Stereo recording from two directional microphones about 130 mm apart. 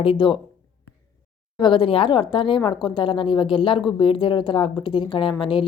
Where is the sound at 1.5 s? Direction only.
40° left (ahead or behind).